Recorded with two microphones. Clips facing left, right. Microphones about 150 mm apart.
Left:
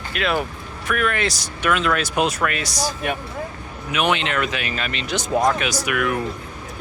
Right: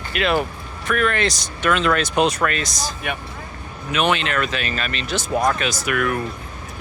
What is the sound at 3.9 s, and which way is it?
Speech, 15° left (ahead or behind).